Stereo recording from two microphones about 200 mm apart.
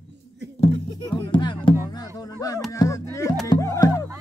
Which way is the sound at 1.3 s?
25° left (ahead or behind).